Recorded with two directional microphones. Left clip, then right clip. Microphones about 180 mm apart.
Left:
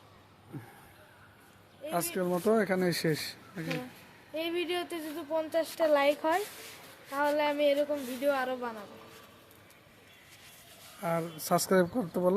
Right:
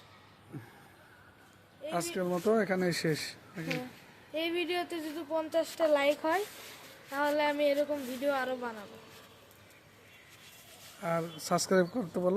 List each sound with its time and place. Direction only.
1.9 s speech: 10° left (ahead or behind)
11.0 s speech: 10° left (ahead or behind)